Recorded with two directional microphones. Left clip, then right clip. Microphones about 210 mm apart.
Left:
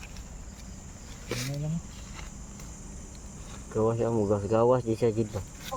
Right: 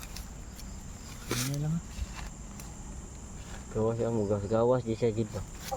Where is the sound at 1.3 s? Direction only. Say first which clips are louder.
Right 1 dB; 50° right (ahead or behind).